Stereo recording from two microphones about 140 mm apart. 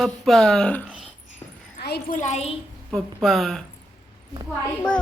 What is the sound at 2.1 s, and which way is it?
Speech, 60° left (ahead or behind).